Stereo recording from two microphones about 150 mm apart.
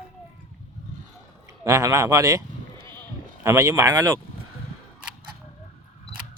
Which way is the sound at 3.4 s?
20° right (ahead or behind).